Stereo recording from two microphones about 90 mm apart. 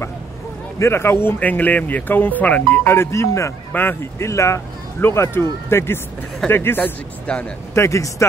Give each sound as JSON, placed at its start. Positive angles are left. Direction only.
{"t": 0.7, "sound": "speech", "side_deg": 30}
{"t": 7.2, "sound": "speech", "side_deg": 15}
{"t": 7.7, "sound": "speech", "side_deg": 35}